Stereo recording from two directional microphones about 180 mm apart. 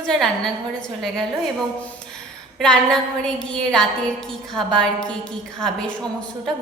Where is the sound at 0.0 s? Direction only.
5° left (ahead or behind).